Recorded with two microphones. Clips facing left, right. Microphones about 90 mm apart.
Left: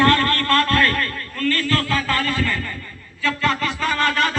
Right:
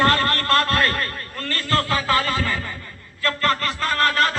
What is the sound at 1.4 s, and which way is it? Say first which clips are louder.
Speech: left 2 dB; 30° right (ahead or behind).